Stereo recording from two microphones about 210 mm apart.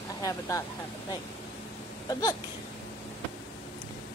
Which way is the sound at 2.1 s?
15° left (ahead or behind).